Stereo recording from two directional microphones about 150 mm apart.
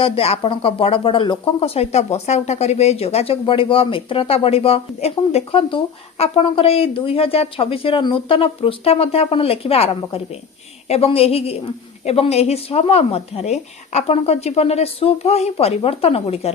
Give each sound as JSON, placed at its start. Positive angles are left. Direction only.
{"t": 0.0, "sound": "speech", "side_deg": 40}